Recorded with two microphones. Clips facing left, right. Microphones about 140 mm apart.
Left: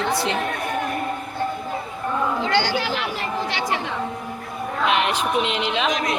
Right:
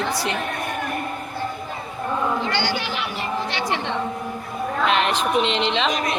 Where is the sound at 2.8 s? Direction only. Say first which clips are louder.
Left 2 dB; 90° left.